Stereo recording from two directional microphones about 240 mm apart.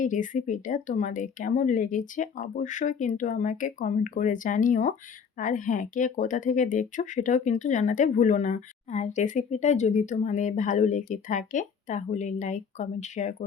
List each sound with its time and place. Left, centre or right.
0.0 s speech: left